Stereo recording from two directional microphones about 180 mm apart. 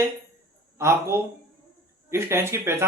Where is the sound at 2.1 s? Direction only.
15° right (ahead or behind).